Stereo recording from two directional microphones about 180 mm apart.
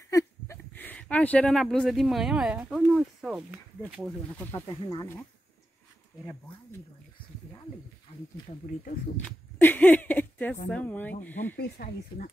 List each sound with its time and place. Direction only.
0.1 s speech: 15° left (ahead or behind); by 3.6 s 5° right (ahead or behind)
4.5 s speech: 15° left (ahead or behind)
8.1 s speech: 40° left (ahead or behind)
8.5 s speech: 50° left (ahead or behind)
9.1 s a sound: 10° left (ahead or behind)
10.7 s speech: 10° left (ahead or behind)
11.5 s speech: 55° left (ahead or behind)